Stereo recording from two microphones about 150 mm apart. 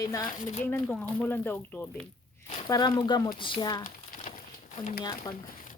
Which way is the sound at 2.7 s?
30° left (ahead or behind).